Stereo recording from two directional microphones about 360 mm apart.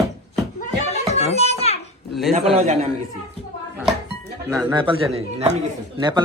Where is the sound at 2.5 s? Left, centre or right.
Centre.